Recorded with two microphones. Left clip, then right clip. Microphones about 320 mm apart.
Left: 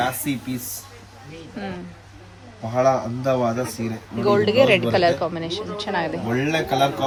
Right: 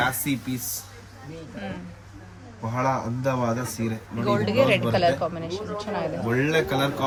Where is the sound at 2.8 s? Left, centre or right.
Centre.